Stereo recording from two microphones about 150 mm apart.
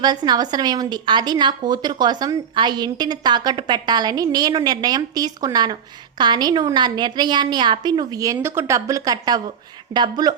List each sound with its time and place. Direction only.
0.0 s a woman's voice: 25° right (ahead or behind)